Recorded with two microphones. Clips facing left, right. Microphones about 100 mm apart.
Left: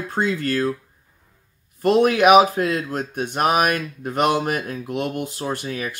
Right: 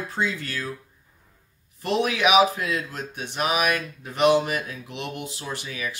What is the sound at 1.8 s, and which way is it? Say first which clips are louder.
Speech: left 8 dB; 45° left (ahead or behind).